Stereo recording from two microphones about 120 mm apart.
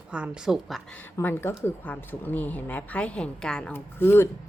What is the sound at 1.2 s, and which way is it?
Speech, 15° left (ahead or behind).